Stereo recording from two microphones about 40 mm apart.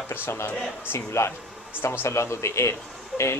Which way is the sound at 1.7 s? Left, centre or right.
Left.